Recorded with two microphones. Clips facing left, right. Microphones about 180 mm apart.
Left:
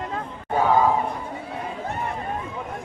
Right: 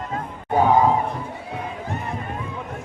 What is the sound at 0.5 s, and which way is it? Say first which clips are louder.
Crowd: right 2 dB; 20° right (ahead or behind).